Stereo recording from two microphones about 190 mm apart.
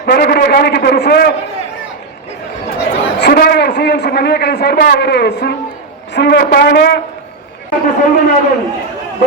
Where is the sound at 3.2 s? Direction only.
55° left (ahead or behind).